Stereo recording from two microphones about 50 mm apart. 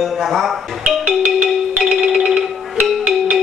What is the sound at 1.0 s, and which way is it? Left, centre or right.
Marimba, right.